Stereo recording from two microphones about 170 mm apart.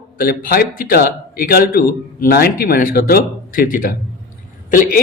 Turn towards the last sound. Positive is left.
turn(degrees=50)  # may be behind; listen again after turning